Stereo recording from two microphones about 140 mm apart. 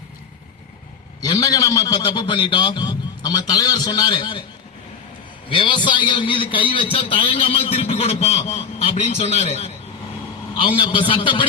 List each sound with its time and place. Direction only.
1.2 s a man's voice: 25° left (ahead or behind)
5.5 s a man's voice: 35° left (ahead or behind)
10.8 s a man's voice: 40° left (ahead or behind)